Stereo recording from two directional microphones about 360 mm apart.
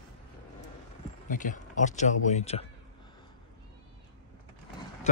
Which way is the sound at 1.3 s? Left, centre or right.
Left.